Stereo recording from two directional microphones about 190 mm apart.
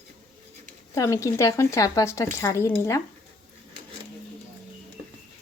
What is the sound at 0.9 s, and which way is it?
Speech, 15° left (ahead or behind).